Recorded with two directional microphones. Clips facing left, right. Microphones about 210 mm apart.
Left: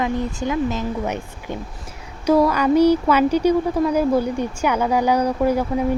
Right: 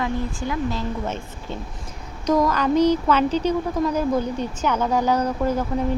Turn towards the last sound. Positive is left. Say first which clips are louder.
# left 3 dB
turn(degrees=10)  # may be behind; listen again after turning